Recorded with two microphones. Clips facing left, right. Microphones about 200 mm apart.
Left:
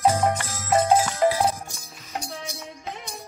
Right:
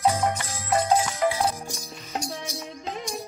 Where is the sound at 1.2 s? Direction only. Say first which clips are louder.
Left 4 dB; 30° left (ahead or behind).